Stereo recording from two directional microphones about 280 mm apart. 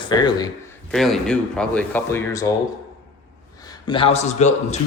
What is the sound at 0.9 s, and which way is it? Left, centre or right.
Speech, centre.